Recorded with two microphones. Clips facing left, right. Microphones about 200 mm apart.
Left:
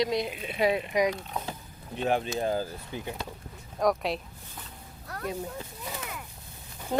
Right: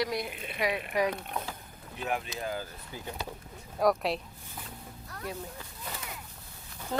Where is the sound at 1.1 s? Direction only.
60° right (ahead or behind).